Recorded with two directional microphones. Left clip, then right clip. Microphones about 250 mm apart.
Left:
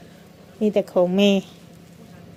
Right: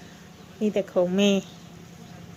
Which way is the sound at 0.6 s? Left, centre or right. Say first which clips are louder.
Left 5 dB; left.